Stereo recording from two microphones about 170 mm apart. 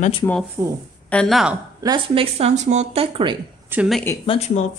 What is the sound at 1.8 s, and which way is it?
Speech, 30° right (ahead or behind).